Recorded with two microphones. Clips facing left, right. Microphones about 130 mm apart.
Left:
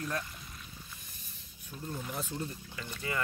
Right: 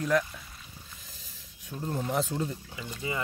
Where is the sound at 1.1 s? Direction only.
90° right.